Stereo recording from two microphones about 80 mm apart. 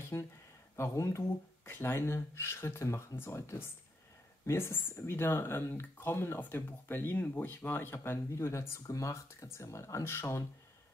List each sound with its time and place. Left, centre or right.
0.1 s speech: left